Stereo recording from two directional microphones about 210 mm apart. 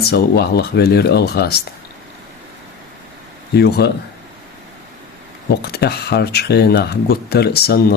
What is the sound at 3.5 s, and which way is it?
Speech, 50° left (ahead or behind).